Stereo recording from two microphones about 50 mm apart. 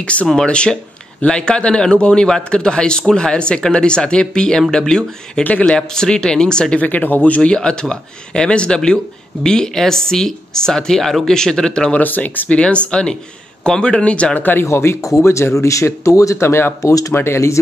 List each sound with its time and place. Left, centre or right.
0.0 s a man's voice: left
5.4 s speech: left
5.7 s a man's voice: centre
6.8 s a man's voice: left; by 11.9 s centre
11.9 s speech: left
14.4 s speech: left
14.7 s speech: left
16.4 s speech: left